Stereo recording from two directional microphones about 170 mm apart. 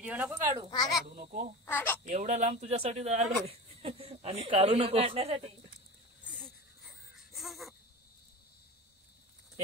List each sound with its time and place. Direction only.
0.0 s speech: 10° right (ahead or behind)
1.0 s a child's voice: 50° right (ahead or behind)
1.7 s speech: 10° left (ahead or behind)
2.0 s speech: 45° right (ahead or behind)
6.2 s a sound: 5° left (ahead or behind)